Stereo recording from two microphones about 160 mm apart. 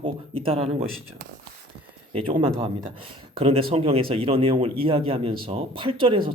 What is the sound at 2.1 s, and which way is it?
Speech, 35° right (ahead or behind).